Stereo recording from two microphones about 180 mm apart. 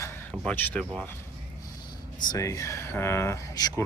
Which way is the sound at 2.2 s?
20° left (ahead or behind).